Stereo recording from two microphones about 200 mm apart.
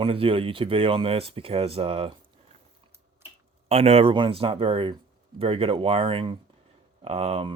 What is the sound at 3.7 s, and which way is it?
Speech, 30° right (ahead or behind).